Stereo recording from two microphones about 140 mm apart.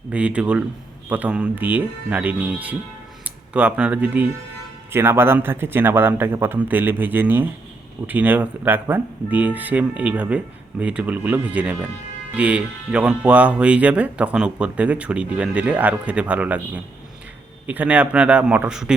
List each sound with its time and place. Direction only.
0.1 s speech: 10° right (ahead or behind)